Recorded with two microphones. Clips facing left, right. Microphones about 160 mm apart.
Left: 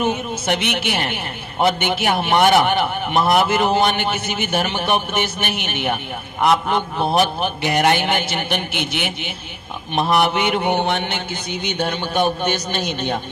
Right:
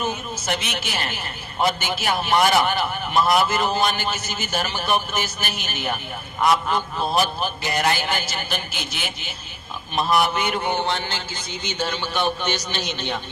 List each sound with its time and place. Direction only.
0.0 s a man's voice: 60° left (ahead or behind)